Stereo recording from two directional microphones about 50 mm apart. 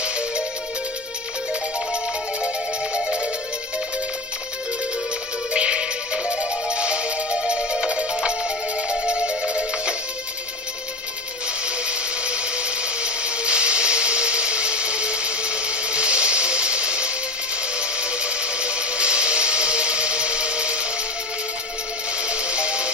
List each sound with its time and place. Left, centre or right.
2.4 s music: right
5.5 s music: right
11.6 s a sound: right
22.2 s music: right